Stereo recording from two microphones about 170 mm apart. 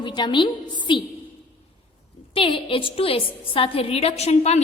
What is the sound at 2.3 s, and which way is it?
A woman's voice, 30° left (ahead or behind).